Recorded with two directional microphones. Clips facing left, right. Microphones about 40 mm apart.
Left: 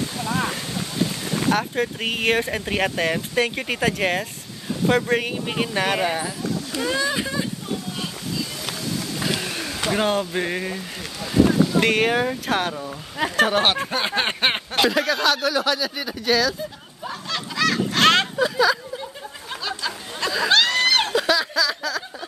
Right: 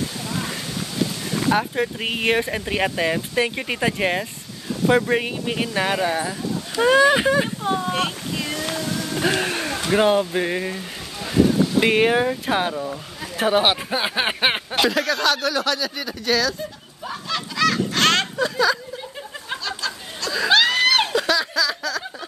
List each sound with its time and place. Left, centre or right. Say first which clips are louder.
0.2 s a sound: left 4 dB; left
0.5 s boat: left 1 dB; centre
1.5 s speech: right 2 dB; centre
6.8 s speech: right 10 dB; right
7.1 s boat: right 7 dB; right
9.2 s a sound: right 6 dB; right
9.9 s speech: right 5 dB; centre
11.8 s speech: right 2 dB; centre
17.0 s honk: right 1 dB; centre
20.4 s a sound: right 2 dB; centre